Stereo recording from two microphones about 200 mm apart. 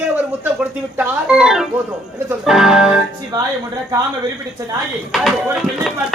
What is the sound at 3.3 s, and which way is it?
Speech, 20° right (ahead or behind).